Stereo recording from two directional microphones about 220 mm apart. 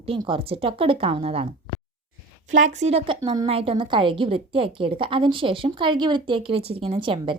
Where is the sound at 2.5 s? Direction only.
35° right (ahead or behind).